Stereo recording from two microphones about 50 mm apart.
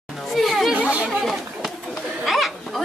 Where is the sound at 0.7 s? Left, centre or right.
Right.